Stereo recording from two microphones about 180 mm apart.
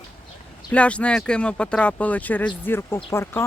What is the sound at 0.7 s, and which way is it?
Speech, 5° left (ahead or behind).